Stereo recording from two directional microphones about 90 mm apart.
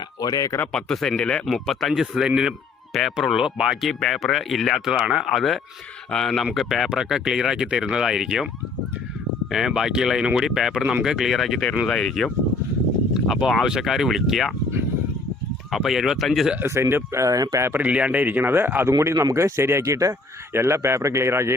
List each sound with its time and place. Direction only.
0.2 s speech: 45° left (ahead or behind)
0.7 s speech: 5° left (ahead or behind)
3.8 s speech: centre (ahead or behind)
9.5 s speech: 5° right (ahead or behind)
15.7 s speech: 5° right (ahead or behind)
16.6 s a man's voice: 30° right (ahead or behind)
17.7 s speech: 15° right (ahead or behind)
18.9 s a man's voice: 35° right (ahead or behind)